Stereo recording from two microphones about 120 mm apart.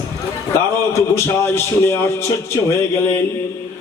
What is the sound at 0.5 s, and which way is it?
A man's voice, 20° left (ahead or behind).